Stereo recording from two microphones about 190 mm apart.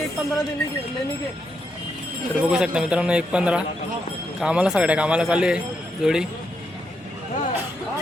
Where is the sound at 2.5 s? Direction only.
5° right (ahead or behind).